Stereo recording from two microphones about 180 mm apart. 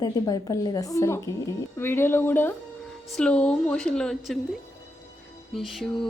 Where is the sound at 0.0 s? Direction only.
20° left (ahead or behind); by 4.4 s 5° left (ahead or behind).